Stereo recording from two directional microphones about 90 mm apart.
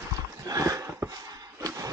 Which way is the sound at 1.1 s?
40° right (ahead or behind).